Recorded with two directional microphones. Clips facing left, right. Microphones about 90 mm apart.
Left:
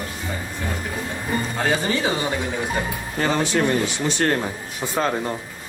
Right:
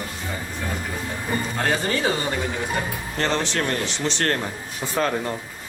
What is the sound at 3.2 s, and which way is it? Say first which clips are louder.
Speech: left 3 dB; 10° left (ahead or behind).